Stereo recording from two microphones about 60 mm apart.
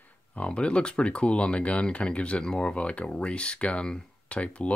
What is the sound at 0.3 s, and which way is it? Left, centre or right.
Speech, centre.